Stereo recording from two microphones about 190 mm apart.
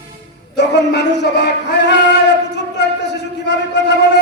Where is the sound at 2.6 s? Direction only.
65° left (ahead or behind).